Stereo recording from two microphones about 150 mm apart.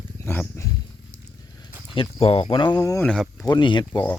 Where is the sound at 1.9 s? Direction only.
40° left (ahead or behind); by 3.0 s 25° left (ahead or behind).